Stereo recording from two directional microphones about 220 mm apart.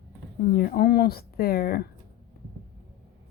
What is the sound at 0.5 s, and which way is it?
Speech, 40° left (ahead or behind).